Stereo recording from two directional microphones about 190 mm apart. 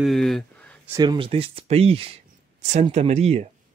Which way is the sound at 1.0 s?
25° right (ahead or behind).